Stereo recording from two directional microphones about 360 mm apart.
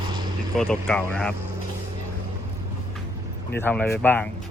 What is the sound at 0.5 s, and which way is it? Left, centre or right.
Speech, centre.